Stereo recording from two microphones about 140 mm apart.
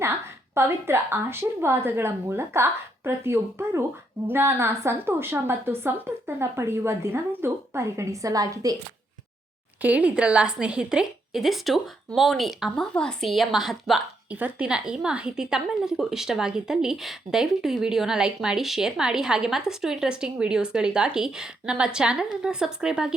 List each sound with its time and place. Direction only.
0.0 s a woman's voice: 20° right (ahead or behind)
9.8 s a woman's voice: 10° right (ahead or behind)